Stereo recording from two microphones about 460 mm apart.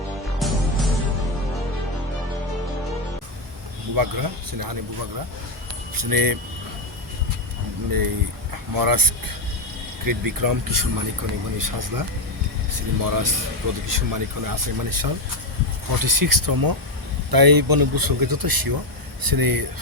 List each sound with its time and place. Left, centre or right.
0.3 s music: centre
3.9 s speech: right
6.0 s speech: right
7.9 s speech: right